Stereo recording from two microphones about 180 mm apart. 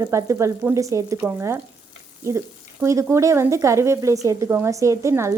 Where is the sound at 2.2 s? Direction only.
15° right (ahead or behind).